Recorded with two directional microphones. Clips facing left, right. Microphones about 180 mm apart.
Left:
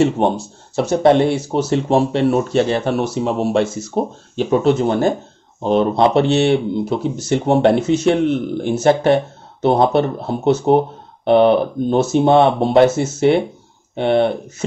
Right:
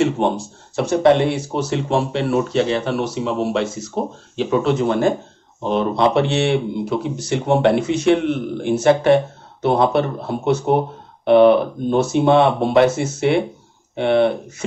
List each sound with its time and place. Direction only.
0.7 s speech: 40° left (ahead or behind)